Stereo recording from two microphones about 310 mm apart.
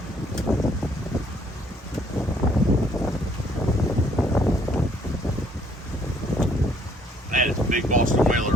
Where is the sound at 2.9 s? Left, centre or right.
Centre.